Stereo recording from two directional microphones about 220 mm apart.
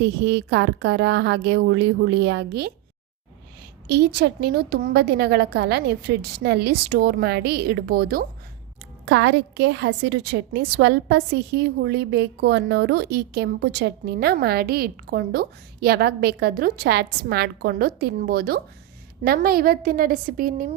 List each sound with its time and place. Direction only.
0.0 s a woman's voice: 50° right (ahead or behind)
3.8 s a woman's voice: 50° right (ahead or behind)